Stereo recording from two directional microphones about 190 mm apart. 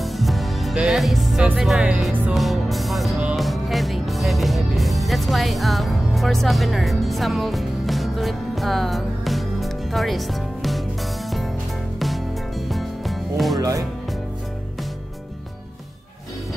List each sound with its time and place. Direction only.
0.0 s music: centre (ahead or behind)
12.0 s music: centre (ahead or behind)
13.6 s speech: 15° right (ahead or behind)